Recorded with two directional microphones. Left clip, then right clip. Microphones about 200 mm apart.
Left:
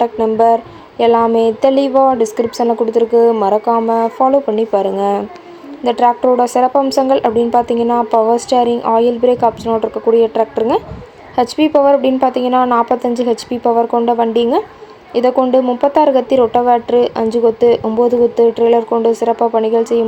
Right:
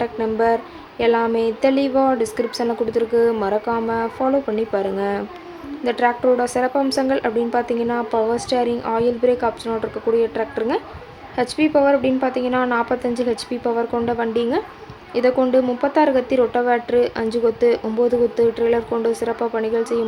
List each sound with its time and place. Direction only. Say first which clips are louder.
0.0 s speech: left 8 dB; 15° left (ahead or behind)